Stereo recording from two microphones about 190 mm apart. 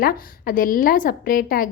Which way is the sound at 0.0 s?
50° left (ahead or behind).